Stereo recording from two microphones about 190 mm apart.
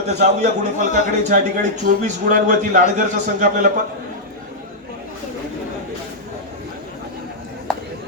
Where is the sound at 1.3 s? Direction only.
45° right (ahead or behind).